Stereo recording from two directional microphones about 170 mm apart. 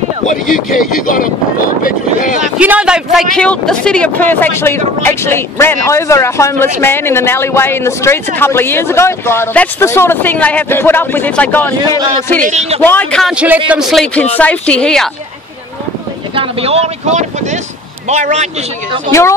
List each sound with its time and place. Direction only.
0.3 s speech: 50° left (ahead or behind)
2.6 s a man's voice: 5° right (ahead or behind); by 12.0 s 10° left (ahead or behind)
12.4 s speech: 40° right (ahead or behind)
12.8 s a man's voice: 10° left (ahead or behind)
13.2 s a woman's voice: 5° right (ahead or behind)
16.3 s a man's voice: 35° right (ahead or behind)